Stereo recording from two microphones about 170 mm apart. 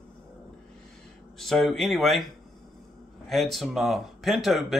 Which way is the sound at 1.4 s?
Centre (ahead or behind).